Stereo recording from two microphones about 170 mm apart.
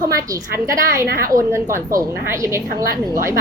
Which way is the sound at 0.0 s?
20° right (ahead or behind).